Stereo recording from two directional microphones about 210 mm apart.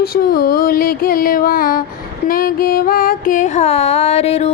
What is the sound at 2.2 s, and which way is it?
Carnatic music, 45° left (ahead or behind).